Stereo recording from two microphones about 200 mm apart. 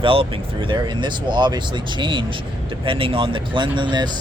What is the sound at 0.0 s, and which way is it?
Speech, 25° right (ahead or behind).